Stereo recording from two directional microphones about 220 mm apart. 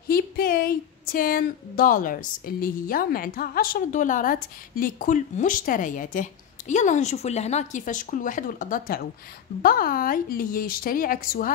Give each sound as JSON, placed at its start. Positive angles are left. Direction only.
{"t": 0.1, "sound": "speech", "side_deg": 45}